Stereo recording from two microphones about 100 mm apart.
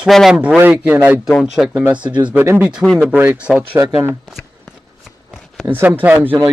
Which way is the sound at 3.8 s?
25° right (ahead or behind).